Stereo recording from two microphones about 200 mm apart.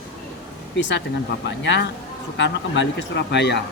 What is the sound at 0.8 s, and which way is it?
A woman's voice, 65° left (ahead or behind).